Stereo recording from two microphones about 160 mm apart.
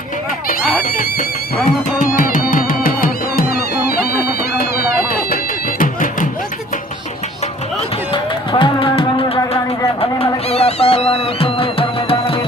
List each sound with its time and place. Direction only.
2.0 s music: 60° left (ahead or behind)
3.8 s music: 80° left
5.8 s music: 55° left (ahead or behind)
8.1 s music: 30° left (ahead or behind)